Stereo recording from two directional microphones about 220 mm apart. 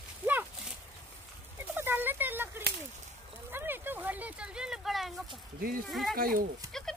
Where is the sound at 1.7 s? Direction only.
10° right (ahead or behind).